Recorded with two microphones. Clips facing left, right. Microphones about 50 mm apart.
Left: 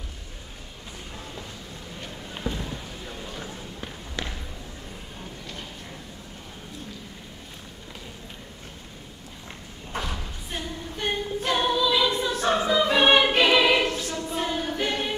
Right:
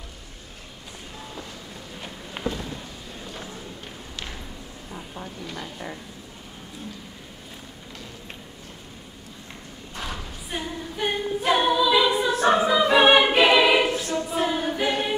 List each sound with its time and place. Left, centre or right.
2.4 s a sound: left
9.9 s thump: left
10.5 s a capella: centre
14.3 s choir: centre